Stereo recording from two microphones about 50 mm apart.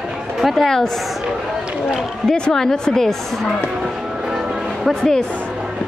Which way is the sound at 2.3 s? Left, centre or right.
Centre.